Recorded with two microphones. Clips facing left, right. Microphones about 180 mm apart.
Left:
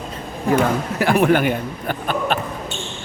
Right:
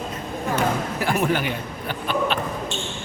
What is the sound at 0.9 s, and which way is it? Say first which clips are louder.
A man's voice: left 9 dB; 70° left (ahead or behind).